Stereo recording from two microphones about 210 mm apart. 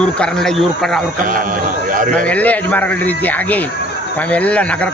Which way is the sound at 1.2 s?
40° right (ahead or behind).